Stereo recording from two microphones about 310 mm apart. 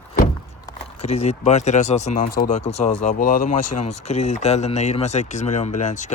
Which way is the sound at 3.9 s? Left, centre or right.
Left.